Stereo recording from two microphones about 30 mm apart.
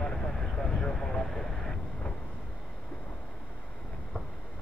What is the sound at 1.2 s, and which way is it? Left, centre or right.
Vehicle, centre.